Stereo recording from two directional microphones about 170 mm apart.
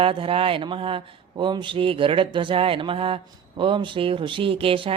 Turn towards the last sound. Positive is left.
turn(degrees=-30)  # may be behind; listen again after turning